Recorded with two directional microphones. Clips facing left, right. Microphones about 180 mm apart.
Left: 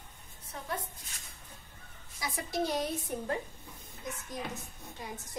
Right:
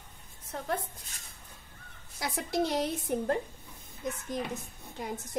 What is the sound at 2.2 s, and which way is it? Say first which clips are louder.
A woman's voice: right 3 dB; 70° right (ahead or behind).